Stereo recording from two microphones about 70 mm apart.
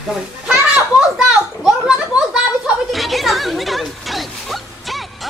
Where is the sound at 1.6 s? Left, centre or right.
Centre.